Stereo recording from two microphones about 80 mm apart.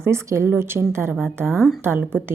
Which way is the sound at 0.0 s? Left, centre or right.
Right.